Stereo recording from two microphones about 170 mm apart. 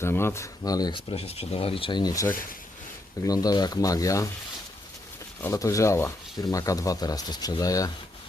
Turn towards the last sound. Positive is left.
turn(degrees=20)  # may be behind; listen again after turning